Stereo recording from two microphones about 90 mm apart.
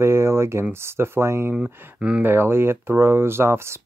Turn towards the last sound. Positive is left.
turn(degrees=-30)  # may be behind; listen again after turning